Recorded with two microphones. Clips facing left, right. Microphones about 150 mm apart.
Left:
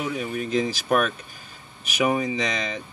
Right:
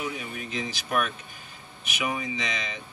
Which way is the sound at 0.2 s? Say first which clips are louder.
Left 9 dB; 40° left (ahead or behind).